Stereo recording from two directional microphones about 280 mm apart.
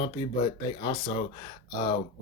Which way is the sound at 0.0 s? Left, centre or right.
Centre.